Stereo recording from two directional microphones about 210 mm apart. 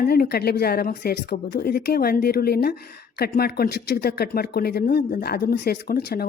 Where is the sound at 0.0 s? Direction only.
50° left (ahead or behind).